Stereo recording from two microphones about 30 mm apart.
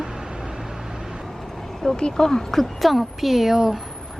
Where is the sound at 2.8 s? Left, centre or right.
Centre.